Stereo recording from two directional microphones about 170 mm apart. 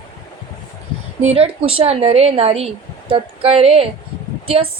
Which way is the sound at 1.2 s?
35° right (ahead or behind).